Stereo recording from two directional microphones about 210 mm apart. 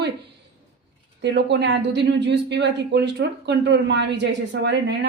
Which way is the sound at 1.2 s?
55° right (ahead or behind).